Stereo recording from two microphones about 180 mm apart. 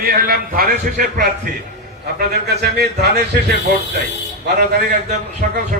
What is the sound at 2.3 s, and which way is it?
A man's voice, 60° right (ahead or behind).